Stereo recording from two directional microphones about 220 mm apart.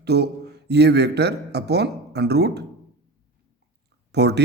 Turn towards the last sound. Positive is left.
turn(degrees=-50)  # may be behind; listen again after turning